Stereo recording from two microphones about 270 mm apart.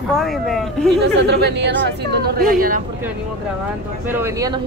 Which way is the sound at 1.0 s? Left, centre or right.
Right.